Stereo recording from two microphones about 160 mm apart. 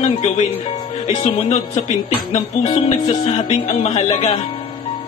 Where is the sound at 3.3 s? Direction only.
40° left (ahead or behind).